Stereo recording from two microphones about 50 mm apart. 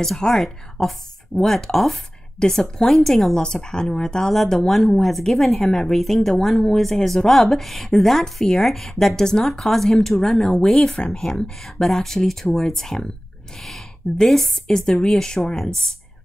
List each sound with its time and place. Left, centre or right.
0.2 s a woman's voice: centre